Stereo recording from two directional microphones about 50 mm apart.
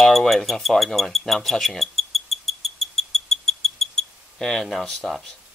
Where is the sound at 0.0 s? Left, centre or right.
Centre.